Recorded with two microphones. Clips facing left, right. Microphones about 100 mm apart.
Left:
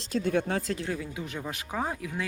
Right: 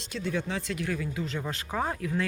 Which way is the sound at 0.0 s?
45° left (ahead or behind).